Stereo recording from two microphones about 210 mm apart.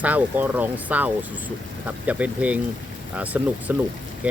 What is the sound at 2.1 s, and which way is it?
Speech, 5° right (ahead or behind).